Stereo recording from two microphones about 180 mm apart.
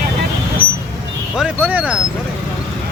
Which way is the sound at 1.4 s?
10° right (ahead or behind).